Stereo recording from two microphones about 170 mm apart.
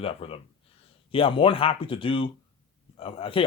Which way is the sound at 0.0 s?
35° left (ahead or behind).